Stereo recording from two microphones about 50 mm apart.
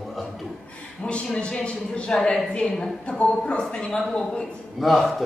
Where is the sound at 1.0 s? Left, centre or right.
Left.